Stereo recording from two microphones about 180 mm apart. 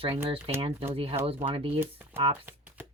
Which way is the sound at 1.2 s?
30° right (ahead or behind).